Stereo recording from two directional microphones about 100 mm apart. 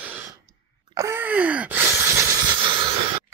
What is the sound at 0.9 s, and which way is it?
Wail, 30° right (ahead or behind).